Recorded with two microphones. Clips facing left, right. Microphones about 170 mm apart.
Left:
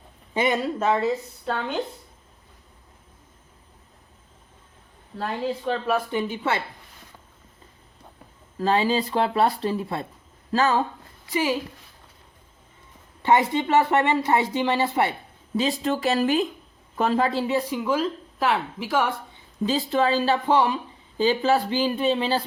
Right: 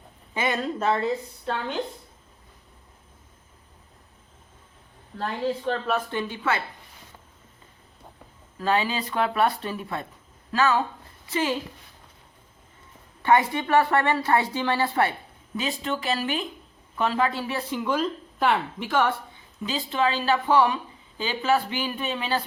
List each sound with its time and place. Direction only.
0.3 s a woman's voice: 20° left (ahead or behind)
5.6 s a woman's voice: 10° left (ahead or behind)
8.6 s a woman's voice: 30° left (ahead or behind)
11.3 s a woman's voice: 10° left (ahead or behind)
13.2 s a woman's voice: 25° left (ahead or behind)
15.5 s speech: 35° left (ahead or behind)
17.4 s a woman's voice: 15° left (ahead or behind)
19.6 s speech: 40° left (ahead or behind)
21.2 s speech: 35° left (ahead or behind)